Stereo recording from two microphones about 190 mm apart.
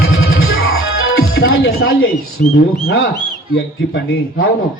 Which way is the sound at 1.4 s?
70° left (ahead or behind).